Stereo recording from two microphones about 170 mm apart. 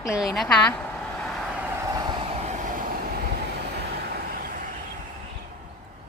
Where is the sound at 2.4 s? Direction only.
50° right (ahead or behind).